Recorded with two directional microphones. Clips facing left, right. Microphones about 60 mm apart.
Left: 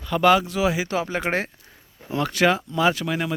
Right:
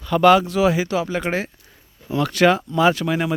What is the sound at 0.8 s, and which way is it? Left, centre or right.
Speech, left.